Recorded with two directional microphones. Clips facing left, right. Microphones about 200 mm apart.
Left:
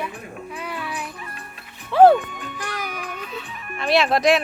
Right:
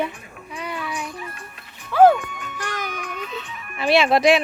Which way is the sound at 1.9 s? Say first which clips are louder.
Left 1 dB; 35° left (ahead or behind).